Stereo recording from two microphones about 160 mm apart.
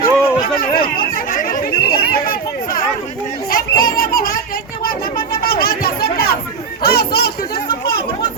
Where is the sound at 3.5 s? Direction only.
60° left (ahead or behind).